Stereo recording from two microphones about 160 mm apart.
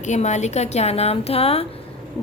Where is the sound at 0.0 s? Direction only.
45° left (ahead or behind).